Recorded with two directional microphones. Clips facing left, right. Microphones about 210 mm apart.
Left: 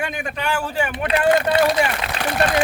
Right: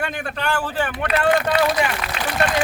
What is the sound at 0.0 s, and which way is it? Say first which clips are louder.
Speech: even; 10° left (ahead or behind).